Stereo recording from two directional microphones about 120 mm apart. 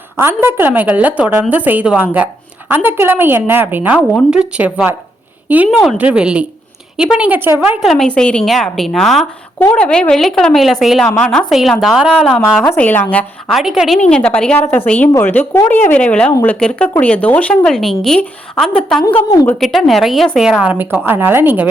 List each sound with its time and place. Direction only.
0.2 s a woman's voice: 20° right (ahead or behind)
6.0 s a woman's voice: 10° right (ahead or behind)
7.8 s a woman's voice: centre (ahead or behind)
12.7 s speech: 15° left (ahead or behind)
13.5 s a woman's voice: centre (ahead or behind)
14.1 s a woman's voice: 10° left (ahead or behind); by 21.7 s 15° right (ahead or behind)